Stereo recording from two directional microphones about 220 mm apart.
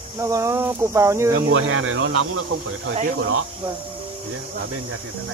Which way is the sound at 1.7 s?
70° right (ahead or behind).